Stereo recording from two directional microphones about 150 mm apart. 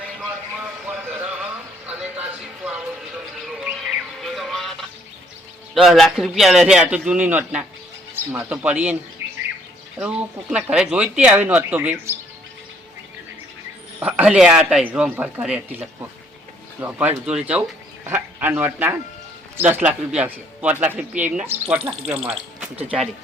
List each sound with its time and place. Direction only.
0.9 s a sound: 5° right (ahead or behind)
3.4 s music: centre (ahead or behind)
5.7 s a man's voice: centre (ahead or behind)
9.2 s bird: 15° right (ahead or behind)
10.0 s speech: 10° right (ahead or behind)
14.0 s speech: 10° right (ahead or behind)